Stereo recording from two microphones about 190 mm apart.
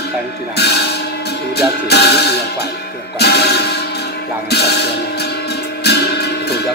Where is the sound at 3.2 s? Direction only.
60° left (ahead or behind).